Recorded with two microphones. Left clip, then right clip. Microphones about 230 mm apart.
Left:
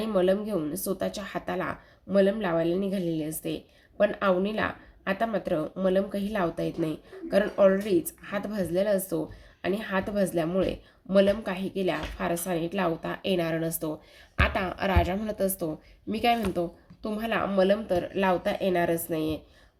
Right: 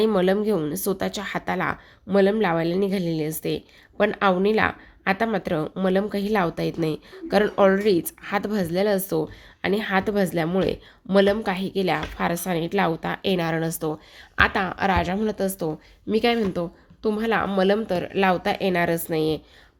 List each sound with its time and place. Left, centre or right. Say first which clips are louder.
0.0 s a woman's voice: right 5 dB; right